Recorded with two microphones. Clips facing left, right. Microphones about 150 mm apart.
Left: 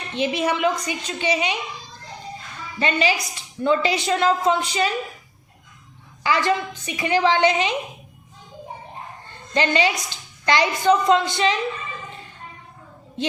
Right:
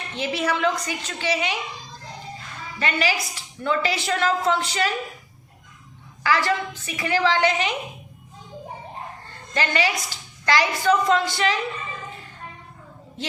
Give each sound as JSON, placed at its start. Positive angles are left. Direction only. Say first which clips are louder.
{"t": 0.1, "sound": "a woman's voice", "louder": "left 3 dB", "side_deg": 20}
{"t": 2.7, "sound": "a woman's voice", "louder": "left 3 dB", "side_deg": 20}
{"t": 6.2, "sound": "a woman's voice", "louder": "left 1 dB", "side_deg": 20}
{"t": 9.6, "sound": "a woman's voice", "louder": "left 3 dB", "side_deg": 20}